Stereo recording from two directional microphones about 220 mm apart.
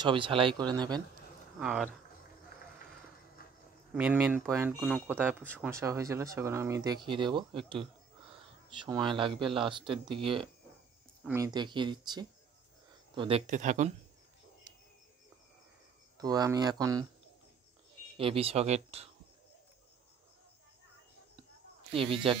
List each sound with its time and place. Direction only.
0.0 s speech: 20° right (ahead or behind)
1.6 s speech: 5° right (ahead or behind)
3.9 s speech: 5° right (ahead or behind); by 13.4 s 20° right (ahead or behind)
13.5 s speech: 35° right (ahead or behind)
16.2 s speech: 15° right (ahead or behind)
18.1 s speech: 25° right (ahead or behind)
21.9 s speech: 25° right (ahead or behind)